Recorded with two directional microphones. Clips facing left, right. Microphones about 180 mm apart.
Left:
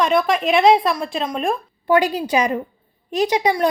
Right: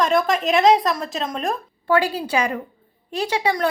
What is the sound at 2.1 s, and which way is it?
Speech, 15° left (ahead or behind).